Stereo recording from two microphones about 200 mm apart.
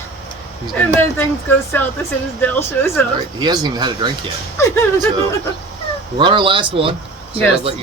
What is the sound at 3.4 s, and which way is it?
Speech, 20° right (ahead or behind).